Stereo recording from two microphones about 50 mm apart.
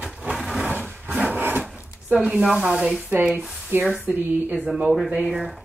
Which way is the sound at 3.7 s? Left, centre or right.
Right.